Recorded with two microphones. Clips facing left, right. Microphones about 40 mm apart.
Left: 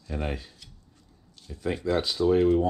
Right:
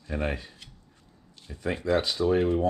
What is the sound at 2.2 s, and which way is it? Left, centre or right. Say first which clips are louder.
Speech: left 4 dB; right.